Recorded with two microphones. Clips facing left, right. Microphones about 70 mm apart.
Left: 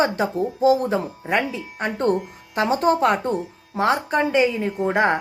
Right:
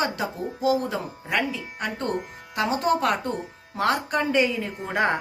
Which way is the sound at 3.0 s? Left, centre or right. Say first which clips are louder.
Left 5 dB; left.